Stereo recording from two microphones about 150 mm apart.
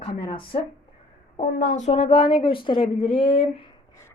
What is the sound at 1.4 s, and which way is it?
Speech, 50° left (ahead or behind).